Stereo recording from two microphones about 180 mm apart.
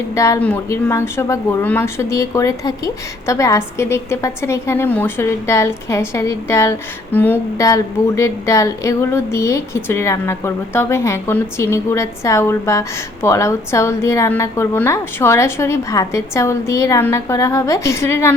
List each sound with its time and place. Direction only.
0.1 s speech: 15° left (ahead or behind)